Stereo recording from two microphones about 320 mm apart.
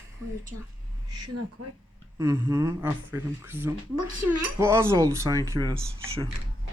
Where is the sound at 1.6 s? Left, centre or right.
Right.